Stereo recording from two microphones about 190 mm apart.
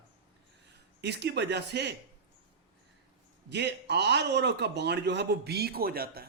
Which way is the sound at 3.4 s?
60° right (ahead or behind).